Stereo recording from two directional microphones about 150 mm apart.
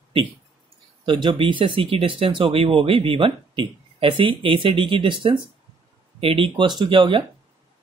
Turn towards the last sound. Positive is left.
turn(degrees=-35)  # may be behind; listen again after turning